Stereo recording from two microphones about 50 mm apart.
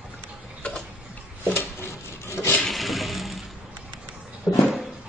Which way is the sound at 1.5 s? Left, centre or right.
Left.